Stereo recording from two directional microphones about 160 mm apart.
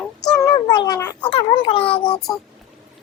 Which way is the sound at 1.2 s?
35° left (ahead or behind).